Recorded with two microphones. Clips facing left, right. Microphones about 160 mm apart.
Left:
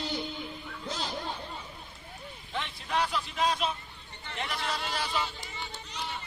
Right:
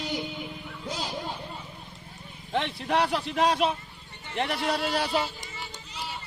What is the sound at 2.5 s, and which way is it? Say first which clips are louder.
Vehicle: right 6 dB; 60° right (ahead or behind).